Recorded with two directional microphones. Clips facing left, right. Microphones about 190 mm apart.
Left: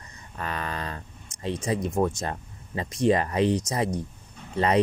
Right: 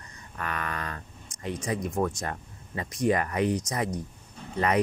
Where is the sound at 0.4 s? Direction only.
30° left (ahead or behind).